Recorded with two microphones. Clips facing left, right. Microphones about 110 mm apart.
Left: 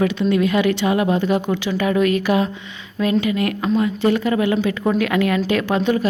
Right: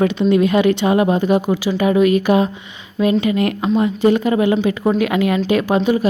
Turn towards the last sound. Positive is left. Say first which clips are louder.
# right 3 dB
turn(degrees=-15)  # may be behind; listen again after turning